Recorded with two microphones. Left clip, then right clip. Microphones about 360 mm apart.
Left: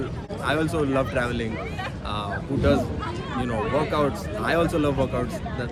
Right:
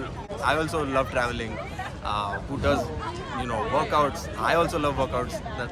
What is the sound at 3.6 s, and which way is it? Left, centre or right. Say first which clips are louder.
Speech: even; right.